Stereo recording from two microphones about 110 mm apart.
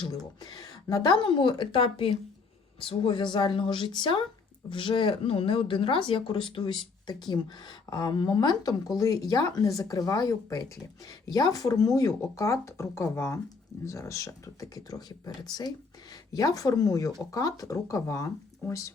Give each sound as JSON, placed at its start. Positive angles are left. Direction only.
{"t": 0.0, "sound": "speech", "side_deg": 40}